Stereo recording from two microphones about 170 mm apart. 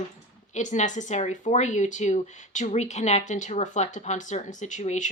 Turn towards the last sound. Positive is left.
turn(degrees=45)  # may be behind; listen again after turning